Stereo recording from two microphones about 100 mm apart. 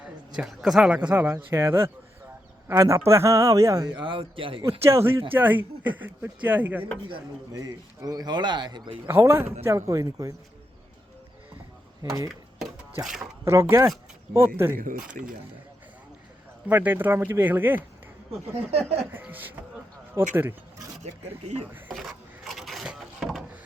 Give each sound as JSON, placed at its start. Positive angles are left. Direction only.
{"t": 0.3, "sound": "a man's voice", "side_deg": -5}
{"t": 4.0, "sound": "speech", "side_deg": -60}
{"t": 4.8, "sound": "speech", "side_deg": -25}
{"t": 7.5, "sound": "speech", "side_deg": -35}
{"t": 9.0, "sound": "a man's voice", "side_deg": -25}
{"t": 12.3, "sound": "a sound", "side_deg": 0}
{"t": 13.4, "sound": "speech", "side_deg": -25}
{"t": 16.6, "sound": "speech", "side_deg": -20}
{"t": 18.7, "sound": "speech", "side_deg": -90}
{"t": 19.1, "sound": "speech", "side_deg": -20}
{"t": 21.9, "sound": "a sound", "side_deg": 0}